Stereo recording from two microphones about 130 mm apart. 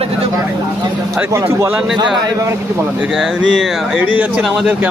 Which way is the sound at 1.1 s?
20° right (ahead or behind).